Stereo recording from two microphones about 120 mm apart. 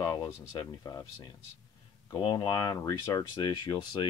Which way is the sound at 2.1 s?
40° left (ahead or behind).